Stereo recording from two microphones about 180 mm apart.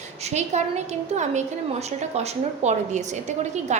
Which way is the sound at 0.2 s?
40° right (ahead or behind).